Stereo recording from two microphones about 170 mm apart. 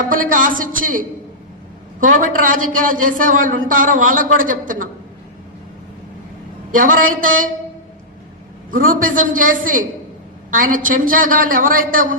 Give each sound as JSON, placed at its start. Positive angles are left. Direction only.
{"t": 0.1, "sound": "a man's voice", "side_deg": -50}
{"t": 6.7, "sound": "a man's voice", "side_deg": -50}
{"t": 8.7, "sound": "a man's voice", "side_deg": -55}